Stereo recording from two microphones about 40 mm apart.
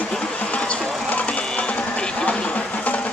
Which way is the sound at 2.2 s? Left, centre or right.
Left.